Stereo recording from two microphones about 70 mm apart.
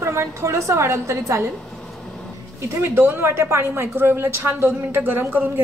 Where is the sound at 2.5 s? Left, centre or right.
Right.